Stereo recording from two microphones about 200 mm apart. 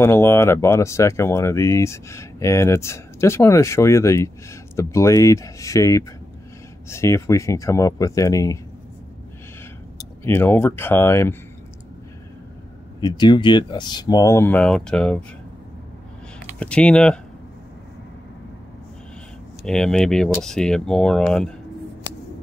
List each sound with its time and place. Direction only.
0.0 s speech: 10° left (ahead or behind)
10.2 s speech: 10° left (ahead or behind)
13.0 s speech: 20° left (ahead or behind); by 15.2 s 5° left (ahead or behind)
16.5 s speech: 5° left (ahead or behind)
19.6 s speech: 5° left (ahead or behind)